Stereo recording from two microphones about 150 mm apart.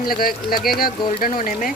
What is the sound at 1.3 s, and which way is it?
Speech, 65° left (ahead or behind).